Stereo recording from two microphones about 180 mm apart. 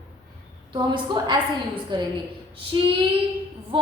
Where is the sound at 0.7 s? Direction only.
25° right (ahead or behind).